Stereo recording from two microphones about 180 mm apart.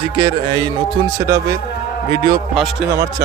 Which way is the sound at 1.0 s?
15° right (ahead or behind).